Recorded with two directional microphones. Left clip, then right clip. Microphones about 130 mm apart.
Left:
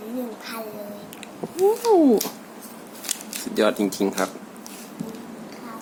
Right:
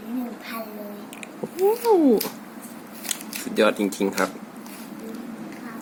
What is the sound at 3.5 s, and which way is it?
Speech, 15° left (ahead or behind).